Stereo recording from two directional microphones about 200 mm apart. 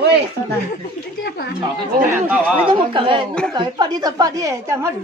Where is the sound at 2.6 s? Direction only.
25° right (ahead or behind).